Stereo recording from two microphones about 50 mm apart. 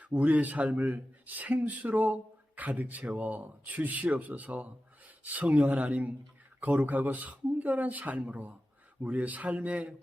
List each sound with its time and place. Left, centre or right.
0.0 s speech: right